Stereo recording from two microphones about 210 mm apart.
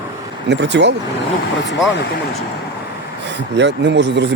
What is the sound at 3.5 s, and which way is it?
Speech, 55° right (ahead or behind).